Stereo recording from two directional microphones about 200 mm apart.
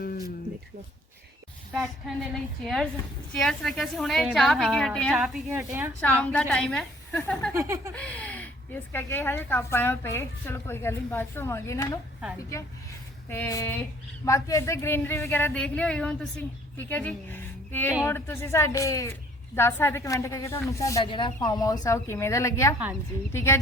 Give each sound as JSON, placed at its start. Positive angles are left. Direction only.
{"t": 0.0, "sound": "a sound", "side_deg": 45}
{"t": 1.7, "sound": "a woman's voice", "side_deg": 0}
{"t": 5.5, "sound": "a woman's voice", "side_deg": -10}
{"t": 6.0, "sound": "a woman's voice", "side_deg": 5}
{"t": 7.5, "sound": "a woman's voice", "side_deg": -15}
{"t": 7.9, "sound": "speech", "side_deg": 5}
{"t": 13.3, "sound": "speech", "side_deg": 15}